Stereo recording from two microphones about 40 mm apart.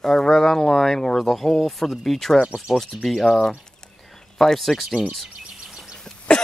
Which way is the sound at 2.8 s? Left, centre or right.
Centre.